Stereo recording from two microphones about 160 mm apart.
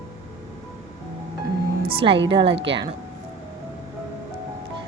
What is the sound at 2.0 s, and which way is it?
Speech, 35° right (ahead or behind).